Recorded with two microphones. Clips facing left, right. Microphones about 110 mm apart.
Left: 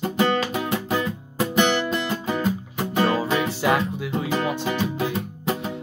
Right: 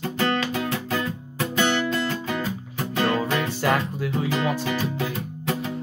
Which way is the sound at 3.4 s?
5° left (ahead or behind).